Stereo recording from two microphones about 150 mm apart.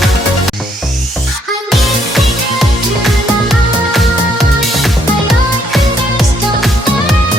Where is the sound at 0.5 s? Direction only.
Centre (ahead or behind).